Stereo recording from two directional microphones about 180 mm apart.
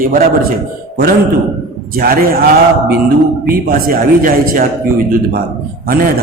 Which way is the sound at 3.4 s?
55° right (ahead or behind).